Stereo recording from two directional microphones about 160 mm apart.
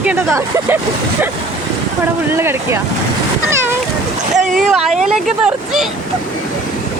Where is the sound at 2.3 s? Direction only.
15° right (ahead or behind).